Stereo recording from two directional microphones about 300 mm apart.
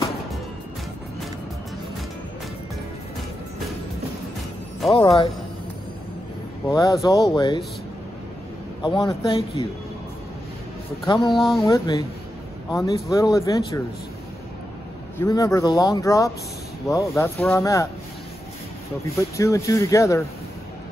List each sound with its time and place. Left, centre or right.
4.9 s speech: centre
6.7 s speech: centre
8.8 s speech: centre
11.3 s speech: centre
11.6 s speech: centre
15.1 s speech: centre
19.1 s speech: centre